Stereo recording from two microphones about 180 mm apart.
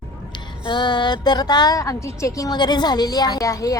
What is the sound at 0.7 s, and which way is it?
A woman's voice, 25° left (ahead or behind).